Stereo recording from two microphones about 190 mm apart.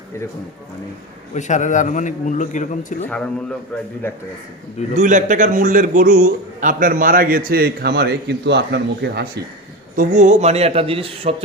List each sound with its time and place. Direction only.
1.3 s a man's voice: 40° left (ahead or behind)
4.9 s a man's voice: 40° right (ahead or behind); by 9.4 s 60° right (ahead or behind)
9.9 s speech: 40° right (ahead or behind)